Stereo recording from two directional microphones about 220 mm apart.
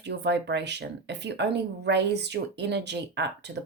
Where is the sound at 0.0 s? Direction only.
50° right (ahead or behind).